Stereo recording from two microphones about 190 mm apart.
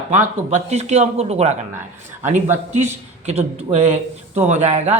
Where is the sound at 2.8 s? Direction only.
35° right (ahead or behind).